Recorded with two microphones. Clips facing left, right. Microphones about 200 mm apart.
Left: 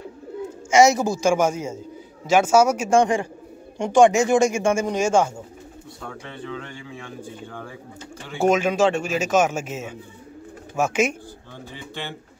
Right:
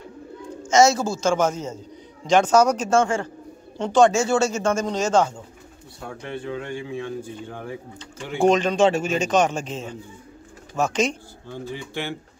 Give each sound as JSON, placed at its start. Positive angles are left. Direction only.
{"t": 0.7, "sound": "speech", "side_deg": 15}
{"t": 6.0, "sound": "speech", "side_deg": -15}
{"t": 8.4, "sound": "a man's voice", "side_deg": 5}
{"t": 11.7, "sound": "speech", "side_deg": -15}